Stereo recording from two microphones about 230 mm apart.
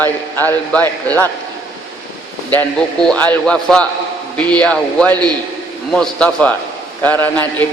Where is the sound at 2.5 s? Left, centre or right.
Centre.